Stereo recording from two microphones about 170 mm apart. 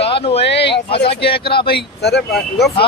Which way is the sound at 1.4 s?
70° left (ahead or behind).